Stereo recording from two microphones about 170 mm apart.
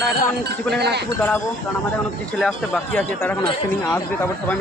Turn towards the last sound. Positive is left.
turn(degrees=10)  # may be behind; listen again after turning